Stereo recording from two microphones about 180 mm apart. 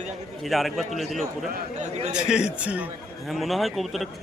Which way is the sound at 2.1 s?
5° right (ahead or behind).